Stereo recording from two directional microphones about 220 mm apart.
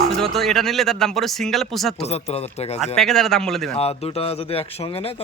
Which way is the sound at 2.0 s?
30° left (ahead or behind).